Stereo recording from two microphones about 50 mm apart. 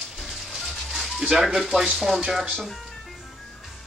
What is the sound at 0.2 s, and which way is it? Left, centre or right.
Music, centre.